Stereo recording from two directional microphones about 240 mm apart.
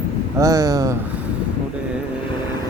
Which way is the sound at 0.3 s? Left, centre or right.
Centre.